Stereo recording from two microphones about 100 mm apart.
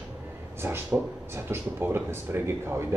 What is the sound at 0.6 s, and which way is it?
Speech, 25° right (ahead or behind).